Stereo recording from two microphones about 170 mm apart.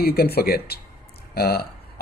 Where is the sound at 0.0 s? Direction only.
65° left (ahead or behind).